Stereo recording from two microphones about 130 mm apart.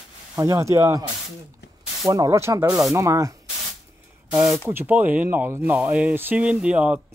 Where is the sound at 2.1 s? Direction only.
25° right (ahead or behind).